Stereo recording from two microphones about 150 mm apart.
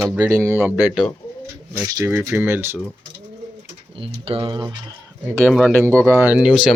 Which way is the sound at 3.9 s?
40° right (ahead or behind).